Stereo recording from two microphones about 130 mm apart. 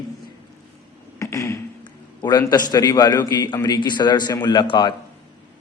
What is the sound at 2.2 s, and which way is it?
A man's voice, 30° left (ahead or behind).